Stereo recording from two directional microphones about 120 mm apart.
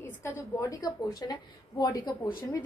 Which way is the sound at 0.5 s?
30° left (ahead or behind).